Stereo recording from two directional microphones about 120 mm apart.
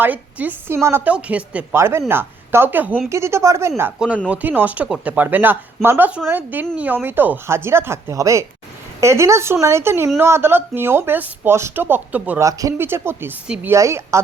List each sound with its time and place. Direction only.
0.0 s speech: 15° right (ahead or behind)
1.7 s speech: 20° right (ahead or behind)
4.3 s speech: 15° right (ahead or behind)
12.4 s speech: 30° right (ahead or behind)
13.7 s speech: 25° right (ahead or behind)